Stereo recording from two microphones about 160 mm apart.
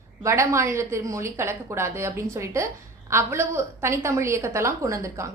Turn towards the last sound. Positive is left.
turn(degrees=-20)  # may be behind; listen again after turning